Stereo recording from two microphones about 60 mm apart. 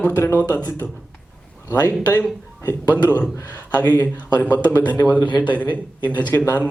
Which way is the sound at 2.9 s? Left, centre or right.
Left.